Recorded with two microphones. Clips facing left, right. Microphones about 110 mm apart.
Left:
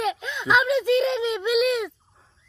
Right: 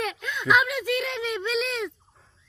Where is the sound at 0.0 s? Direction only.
20° left (ahead or behind).